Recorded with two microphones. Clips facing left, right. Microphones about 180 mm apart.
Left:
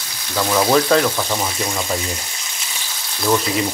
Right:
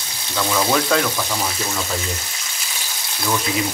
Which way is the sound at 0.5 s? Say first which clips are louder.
Left 4 dB; 15° left (ahead or behind).